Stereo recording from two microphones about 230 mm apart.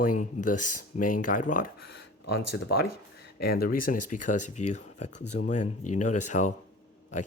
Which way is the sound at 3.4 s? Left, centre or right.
Left.